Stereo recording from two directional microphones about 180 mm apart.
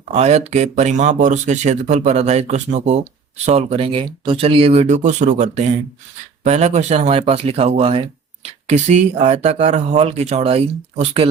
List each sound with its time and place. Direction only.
0.1 s speech: 35° right (ahead or behind)